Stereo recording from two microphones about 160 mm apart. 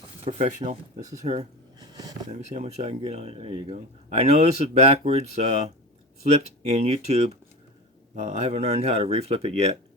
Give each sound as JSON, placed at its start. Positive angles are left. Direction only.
{"t": 0.3, "sound": "speech", "side_deg": -45}
{"t": 1.8, "sound": "a sound", "side_deg": -25}
{"t": 2.3, "sound": "speech", "side_deg": -45}